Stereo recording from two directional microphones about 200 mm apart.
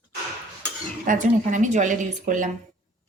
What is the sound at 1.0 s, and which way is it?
Speech, 40° right (ahead or behind).